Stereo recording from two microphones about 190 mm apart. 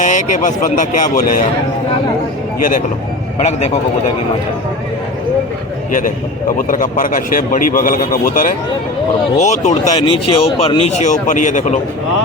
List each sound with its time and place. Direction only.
0.0 s speech: 40° left (ahead or behind)
2.6 s a man's voice: 45° left (ahead or behind)
6.6 s a man's voice: 45° left (ahead or behind)